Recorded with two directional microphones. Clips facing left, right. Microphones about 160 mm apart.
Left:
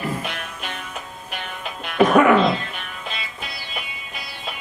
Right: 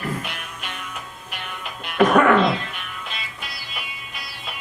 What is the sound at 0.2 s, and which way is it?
Music, 35° left (ahead or behind).